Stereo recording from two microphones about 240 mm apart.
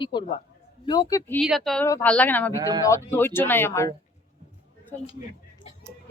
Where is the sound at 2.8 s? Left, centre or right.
Centre.